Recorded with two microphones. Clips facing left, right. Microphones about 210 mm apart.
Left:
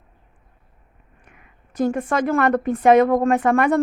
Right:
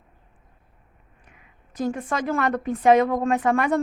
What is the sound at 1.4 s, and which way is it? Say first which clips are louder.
A woman's voice: left 6 dB; 55° left (ahead or behind).